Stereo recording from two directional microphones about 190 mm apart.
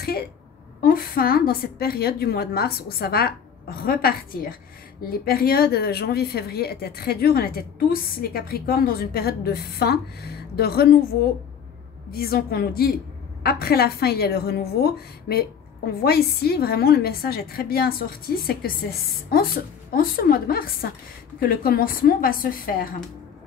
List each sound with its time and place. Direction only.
0.8 s a woman's voice: 50° left (ahead or behind)
12.1 s a woman's voice: 55° left (ahead or behind)